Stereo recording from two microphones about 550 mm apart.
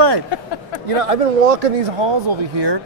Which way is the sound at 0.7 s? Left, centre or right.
Right.